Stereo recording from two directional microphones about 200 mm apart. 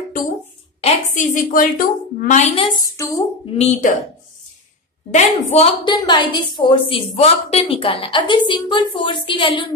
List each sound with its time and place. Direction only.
0.7 s a woman's voice: 35° left (ahead or behind); by 3.3 s 15° left (ahead or behind)
3.5 s speech: 35° left (ahead or behind)
5.1 s a woman's voice: 30° left (ahead or behind)